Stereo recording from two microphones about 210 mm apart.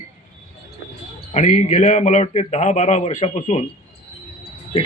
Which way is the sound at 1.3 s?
35° left (ahead or behind).